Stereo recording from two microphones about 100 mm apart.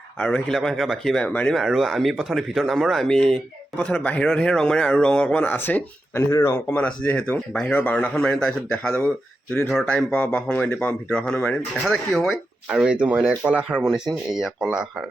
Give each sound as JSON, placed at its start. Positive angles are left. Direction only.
{"t": 0.2, "sound": "speech", "side_deg": 10}
{"t": 1.5, "sound": "speech", "side_deg": 0}
{"t": 6.7, "sound": "speech", "side_deg": 15}
{"t": 7.7, "sound": "speech", "side_deg": 15}
{"t": 12.7, "sound": "speech", "side_deg": -10}